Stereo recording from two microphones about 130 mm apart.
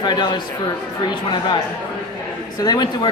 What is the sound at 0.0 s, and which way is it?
Speech, 35° left (ahead or behind).